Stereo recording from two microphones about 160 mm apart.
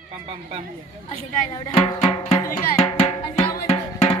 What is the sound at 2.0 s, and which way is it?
Music, 40° left (ahead or behind).